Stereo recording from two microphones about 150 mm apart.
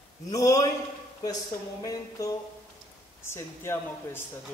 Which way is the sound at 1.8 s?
20° left (ahead or behind).